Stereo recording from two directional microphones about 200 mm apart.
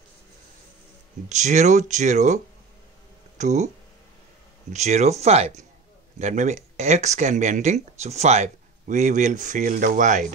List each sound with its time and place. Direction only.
1.3 s speech: 35° right (ahead or behind)
4.7 s speech: 35° right (ahead or behind)